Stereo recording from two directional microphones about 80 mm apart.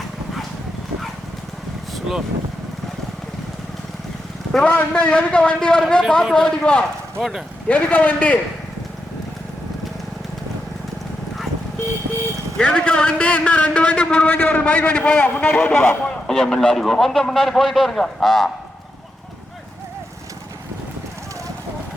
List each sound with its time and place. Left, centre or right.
4.6 s a man's voice: centre
7.2 s a man's voice: centre
7.7 s speech: centre
12.5 s a man's voice: centre
16.2 s a man's voice: centre